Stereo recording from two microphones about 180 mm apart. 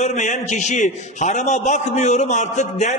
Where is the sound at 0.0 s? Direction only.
40° left (ahead or behind).